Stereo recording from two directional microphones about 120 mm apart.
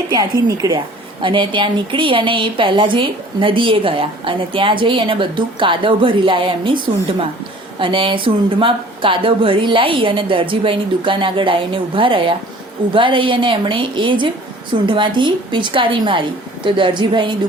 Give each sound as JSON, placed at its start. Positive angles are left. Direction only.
{"t": 0.1, "sound": "a woman's voice", "side_deg": -30}
{"t": 1.2, "sound": "a woman's voice", "side_deg": -45}